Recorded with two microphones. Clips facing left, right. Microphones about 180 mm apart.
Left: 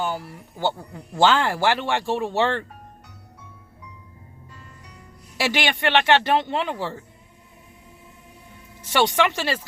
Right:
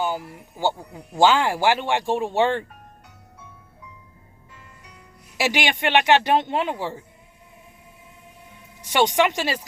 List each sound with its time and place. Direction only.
0.0 s speech: 15° right (ahead or behind)
5.4 s speech: 15° right (ahead or behind)
8.8 s speech: 15° right (ahead or behind)